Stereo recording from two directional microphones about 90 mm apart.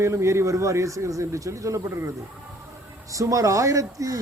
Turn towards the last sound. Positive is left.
turn(degrees=-35)  # may be behind; listen again after turning